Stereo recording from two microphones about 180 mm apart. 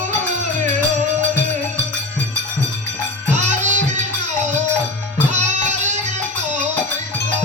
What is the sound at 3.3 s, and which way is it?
Music, 40° right (ahead or behind).